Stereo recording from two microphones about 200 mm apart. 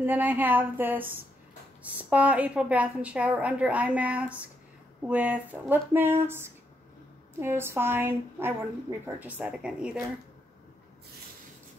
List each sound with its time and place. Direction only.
0.0 s a woman's voice: 10° right (ahead or behind)